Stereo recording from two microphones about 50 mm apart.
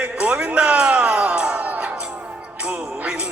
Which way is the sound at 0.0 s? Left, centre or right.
Right.